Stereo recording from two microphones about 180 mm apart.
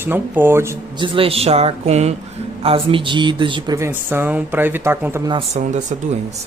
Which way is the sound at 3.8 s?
15° right (ahead or behind).